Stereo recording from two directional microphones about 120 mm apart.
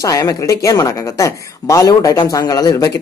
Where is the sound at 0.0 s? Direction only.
30° left (ahead or behind).